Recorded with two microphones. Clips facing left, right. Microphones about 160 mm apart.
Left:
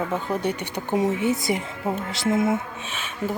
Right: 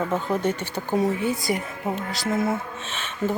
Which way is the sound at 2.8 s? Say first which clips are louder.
Right 2 dB; 10° left (ahead or behind).